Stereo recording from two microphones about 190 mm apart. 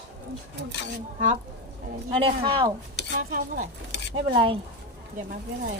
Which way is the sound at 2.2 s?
25° right (ahead or behind).